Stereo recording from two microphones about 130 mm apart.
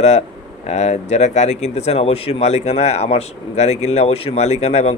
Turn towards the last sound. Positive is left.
turn(degrees=55)  # may be behind; listen again after turning